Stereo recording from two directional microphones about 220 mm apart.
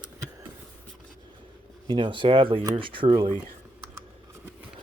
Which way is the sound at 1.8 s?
20° right (ahead or behind).